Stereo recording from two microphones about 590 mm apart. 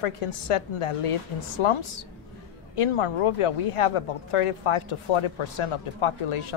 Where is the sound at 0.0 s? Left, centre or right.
Left.